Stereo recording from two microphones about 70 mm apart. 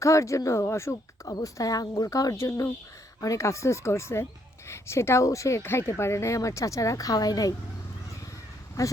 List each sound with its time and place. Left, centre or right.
0.0 s speech: left
1.2 s speech: left